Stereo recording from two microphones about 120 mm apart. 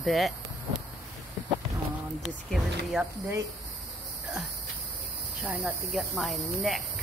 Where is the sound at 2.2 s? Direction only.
Centre (ahead or behind).